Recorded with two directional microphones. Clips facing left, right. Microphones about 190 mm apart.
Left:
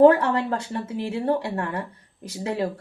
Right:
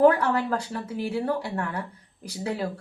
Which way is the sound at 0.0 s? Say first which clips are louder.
Left 4 dB; 25° left (ahead or behind).